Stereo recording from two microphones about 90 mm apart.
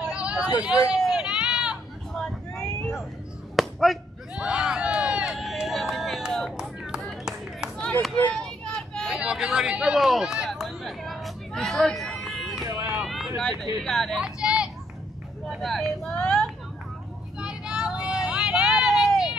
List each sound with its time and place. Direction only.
0.1 s hubbub: 10° right (ahead or behind)
0.9 s a sound: 10° right (ahead or behind)
2.1 s vehicle: 5° left (ahead or behind)
3.5 s chop: centre (ahead or behind)
6.6 s clapping: centre (ahead or behind)
8.2 s a sound: 5° left (ahead or behind)
12.6 s run: 35° right (ahead or behind)
13.0 s a sound: 5° right (ahead or behind)
13.4 s speech: centre (ahead or behind)
14.2 s vehicle: 10° right (ahead or behind)
15.6 s vehicle: 5° left (ahead or behind)
17.4 s vehicle: 10° right (ahead or behind)